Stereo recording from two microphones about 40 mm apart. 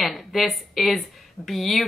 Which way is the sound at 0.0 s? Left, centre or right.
Centre.